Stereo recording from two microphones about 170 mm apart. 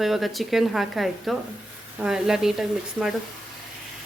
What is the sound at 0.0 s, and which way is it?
A woman's voice, centre (ahead or behind).